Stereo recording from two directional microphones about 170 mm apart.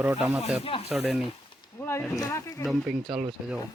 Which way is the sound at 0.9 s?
Centre (ahead or behind).